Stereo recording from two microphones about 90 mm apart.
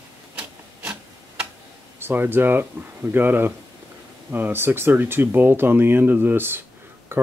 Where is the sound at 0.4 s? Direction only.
15° right (ahead or behind).